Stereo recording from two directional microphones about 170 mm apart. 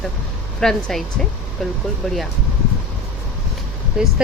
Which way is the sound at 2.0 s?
Centre (ahead or behind).